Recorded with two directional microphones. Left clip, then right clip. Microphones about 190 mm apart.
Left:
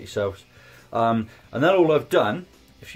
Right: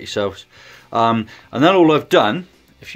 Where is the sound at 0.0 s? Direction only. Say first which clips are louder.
Right 5 dB; 45° right (ahead or behind).